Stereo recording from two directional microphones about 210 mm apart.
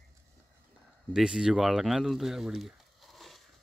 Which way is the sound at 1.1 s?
5° right (ahead or behind).